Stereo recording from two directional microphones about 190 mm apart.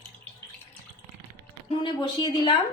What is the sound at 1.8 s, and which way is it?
Speech, 25° left (ahead or behind).